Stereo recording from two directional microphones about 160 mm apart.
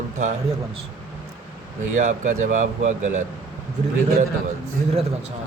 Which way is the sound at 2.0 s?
50° right (ahead or behind).